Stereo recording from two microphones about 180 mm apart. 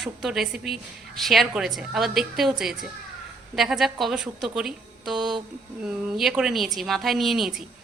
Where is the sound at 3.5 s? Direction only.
Centre (ahead or behind).